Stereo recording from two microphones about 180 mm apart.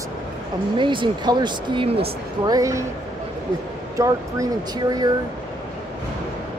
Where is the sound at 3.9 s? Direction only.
15° right (ahead or behind).